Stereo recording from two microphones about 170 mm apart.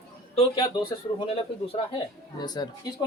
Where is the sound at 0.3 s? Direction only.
25° left (ahead or behind).